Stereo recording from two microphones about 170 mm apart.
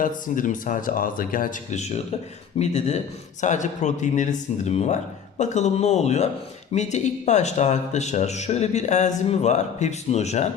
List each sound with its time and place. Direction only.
0.0 s speech: 50° left (ahead or behind)